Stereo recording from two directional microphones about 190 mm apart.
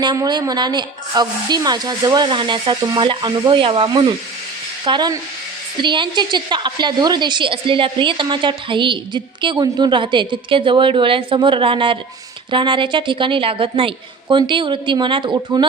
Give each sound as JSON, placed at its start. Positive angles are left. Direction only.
{"t": 0.0, "sound": "a woman's voice", "side_deg": -20}